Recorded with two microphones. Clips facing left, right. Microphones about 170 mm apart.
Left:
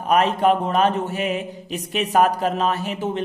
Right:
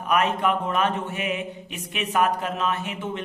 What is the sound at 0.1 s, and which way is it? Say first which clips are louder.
Mantra: left 5 dB; 35° left (ahead or behind).